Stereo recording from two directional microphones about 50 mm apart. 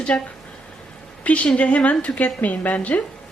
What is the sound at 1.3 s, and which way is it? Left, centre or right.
A woman's voice, left.